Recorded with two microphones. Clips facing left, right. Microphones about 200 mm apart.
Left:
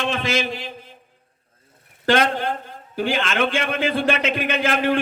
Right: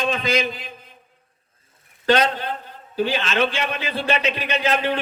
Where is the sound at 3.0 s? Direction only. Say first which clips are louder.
Right 1 dB; 50° left (ahead or behind).